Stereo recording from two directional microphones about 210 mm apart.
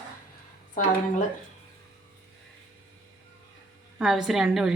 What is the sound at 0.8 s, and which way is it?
Speech, 40° left (ahead or behind).